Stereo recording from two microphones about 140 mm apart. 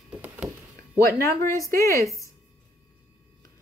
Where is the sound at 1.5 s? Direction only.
20° left (ahead or behind).